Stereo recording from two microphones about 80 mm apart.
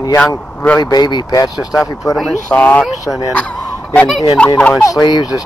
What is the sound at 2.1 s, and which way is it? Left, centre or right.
Speech, left.